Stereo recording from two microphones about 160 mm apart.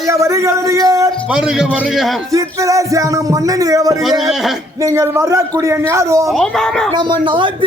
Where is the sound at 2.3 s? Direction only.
20° right (ahead or behind).